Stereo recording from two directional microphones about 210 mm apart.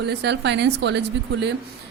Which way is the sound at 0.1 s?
55° right (ahead or behind).